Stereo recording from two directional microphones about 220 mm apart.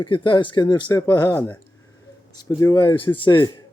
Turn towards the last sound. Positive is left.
turn(degrees=20)  # may be behind; listen again after turning